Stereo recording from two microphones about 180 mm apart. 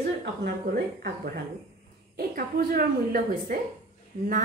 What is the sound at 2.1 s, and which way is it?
A woman's voice, 55° right (ahead or behind).